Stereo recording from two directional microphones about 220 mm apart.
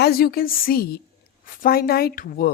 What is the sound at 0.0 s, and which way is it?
A woman's voice, 45° left (ahead or behind).